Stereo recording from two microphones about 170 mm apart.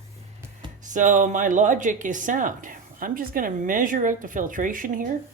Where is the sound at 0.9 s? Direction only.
50° right (ahead or behind).